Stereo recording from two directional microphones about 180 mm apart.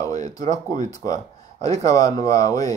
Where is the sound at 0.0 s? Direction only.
20° left (ahead or behind).